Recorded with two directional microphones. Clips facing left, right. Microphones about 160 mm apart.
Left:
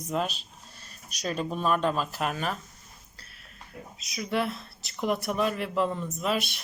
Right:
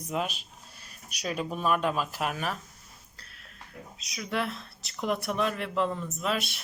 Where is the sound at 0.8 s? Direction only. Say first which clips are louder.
Left 1 dB; 10° right (ahead or behind).